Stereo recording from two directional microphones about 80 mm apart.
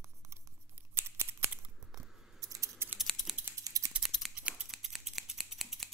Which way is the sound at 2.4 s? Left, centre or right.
Right.